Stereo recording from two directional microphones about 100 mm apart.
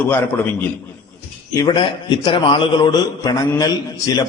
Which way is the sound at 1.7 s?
50° left (ahead or behind).